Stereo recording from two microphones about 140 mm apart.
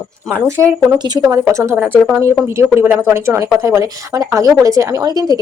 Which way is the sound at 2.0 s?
15° right (ahead or behind).